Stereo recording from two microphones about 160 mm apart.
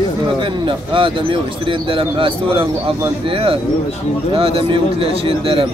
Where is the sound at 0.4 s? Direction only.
30° right (ahead or behind).